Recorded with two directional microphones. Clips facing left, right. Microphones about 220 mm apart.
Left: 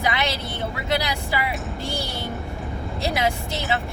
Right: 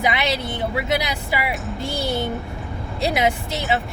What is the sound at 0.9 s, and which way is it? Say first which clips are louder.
Speech: right 2 dB; 15° right (ahead or behind).